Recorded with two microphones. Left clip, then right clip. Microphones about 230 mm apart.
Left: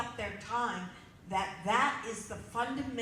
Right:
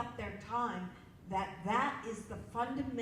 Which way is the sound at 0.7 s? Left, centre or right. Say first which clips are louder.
Left 4 dB; centre.